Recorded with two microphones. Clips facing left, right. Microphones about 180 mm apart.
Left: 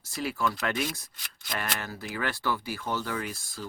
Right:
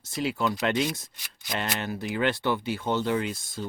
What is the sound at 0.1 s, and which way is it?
Speech, 20° right (ahead or behind).